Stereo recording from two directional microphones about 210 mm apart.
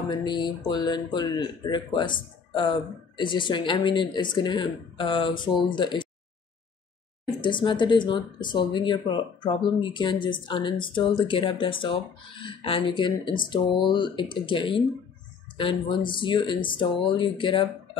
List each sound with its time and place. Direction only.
0.1 s speech: 20° left (ahead or behind)
7.4 s speech: 20° left (ahead or behind)